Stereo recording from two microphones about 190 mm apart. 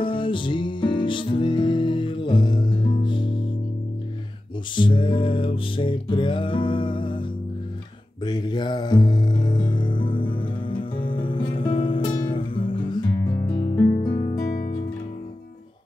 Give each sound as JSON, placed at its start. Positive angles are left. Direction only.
{"t": 0.0, "sound": "music", "side_deg": 25}
{"t": 4.7, "sound": "music", "side_deg": 25}
{"t": 14.4, "sound": "music", "side_deg": 55}